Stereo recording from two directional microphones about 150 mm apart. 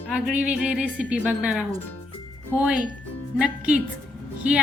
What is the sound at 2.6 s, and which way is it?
A woman's voice, 5° right (ahead or behind).